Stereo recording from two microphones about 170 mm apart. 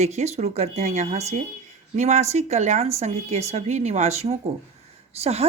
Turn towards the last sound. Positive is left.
turn(degrees=-40)  # may be behind; listen again after turning